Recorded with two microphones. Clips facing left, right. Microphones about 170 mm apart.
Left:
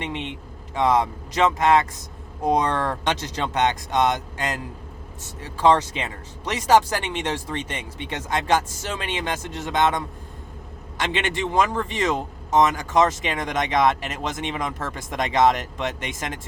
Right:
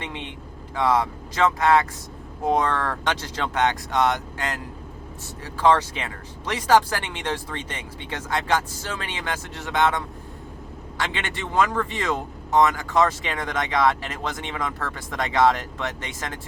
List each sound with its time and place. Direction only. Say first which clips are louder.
0.7 s a man's voice: left 2 dB; 20° left (ahead or behind)